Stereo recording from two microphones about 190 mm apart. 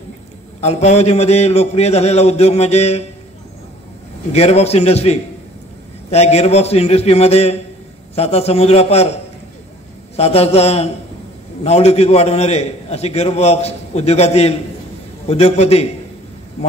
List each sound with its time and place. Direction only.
0.6 s a man's voice: 35° left (ahead or behind)
4.3 s a man's voice: 35° left (ahead or behind)
10.1 s a man's voice: 35° left (ahead or behind)